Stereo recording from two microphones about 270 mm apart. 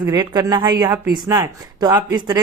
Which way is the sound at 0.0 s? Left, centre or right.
Centre.